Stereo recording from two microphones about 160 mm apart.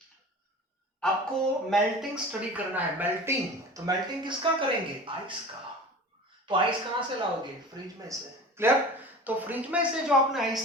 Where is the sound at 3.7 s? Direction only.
25° right (ahead or behind).